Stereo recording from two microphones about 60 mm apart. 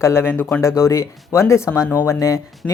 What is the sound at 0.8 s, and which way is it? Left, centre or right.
Speech, left.